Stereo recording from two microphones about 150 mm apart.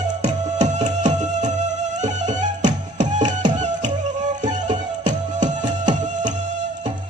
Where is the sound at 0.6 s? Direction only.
55° right (ahead or behind).